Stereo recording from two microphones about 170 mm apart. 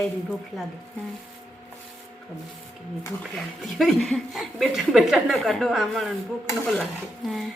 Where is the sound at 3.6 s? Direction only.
Centre (ahead or behind).